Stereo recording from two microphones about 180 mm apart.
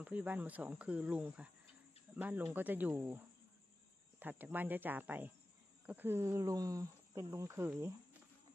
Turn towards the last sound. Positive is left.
turn(degrees=-15)  # may be behind; listen again after turning